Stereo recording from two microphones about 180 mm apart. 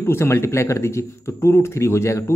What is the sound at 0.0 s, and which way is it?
Speech, 15° left (ahead or behind).